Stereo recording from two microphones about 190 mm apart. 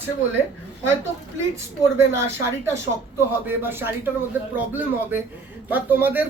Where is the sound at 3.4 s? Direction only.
10° right (ahead or behind).